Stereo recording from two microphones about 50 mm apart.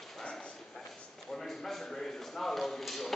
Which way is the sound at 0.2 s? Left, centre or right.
Centre.